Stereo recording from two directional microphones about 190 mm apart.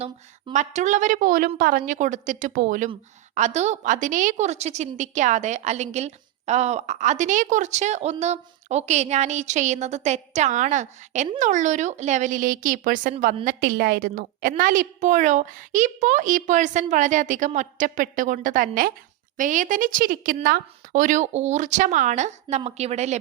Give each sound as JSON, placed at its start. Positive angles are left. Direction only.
{"t": 0.0, "sound": "a woman's voice", "side_deg": -35}